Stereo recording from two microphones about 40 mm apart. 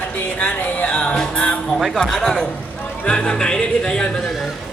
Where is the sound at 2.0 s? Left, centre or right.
Centre.